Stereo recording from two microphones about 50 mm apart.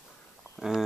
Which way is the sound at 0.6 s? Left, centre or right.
Centre.